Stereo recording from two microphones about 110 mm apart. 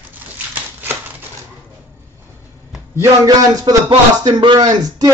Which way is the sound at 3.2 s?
30° right (ahead or behind).